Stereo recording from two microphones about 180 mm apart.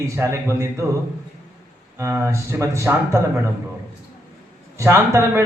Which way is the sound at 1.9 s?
15° right (ahead or behind).